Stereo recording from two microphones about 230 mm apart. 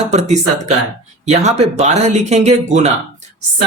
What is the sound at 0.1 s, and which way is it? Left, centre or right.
Speech, right.